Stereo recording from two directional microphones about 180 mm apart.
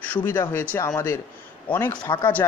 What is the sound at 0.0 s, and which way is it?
Speech, 10° left (ahead or behind).